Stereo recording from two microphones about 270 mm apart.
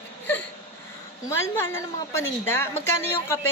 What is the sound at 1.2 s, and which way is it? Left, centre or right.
A woman's voice, centre.